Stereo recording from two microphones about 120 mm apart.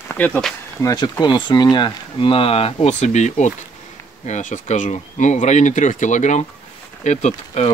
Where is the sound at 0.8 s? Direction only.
30° left (ahead or behind); by 2.9 s 50° left (ahead or behind).